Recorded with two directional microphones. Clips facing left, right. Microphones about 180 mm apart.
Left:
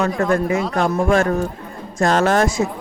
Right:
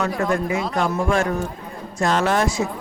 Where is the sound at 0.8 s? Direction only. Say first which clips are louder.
Left 4 dB; 40° left (ahead or behind).